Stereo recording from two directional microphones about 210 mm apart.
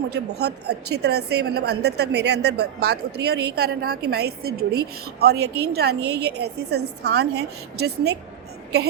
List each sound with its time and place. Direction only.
0.1 s a woman's voice: 50° right (ahead or behind)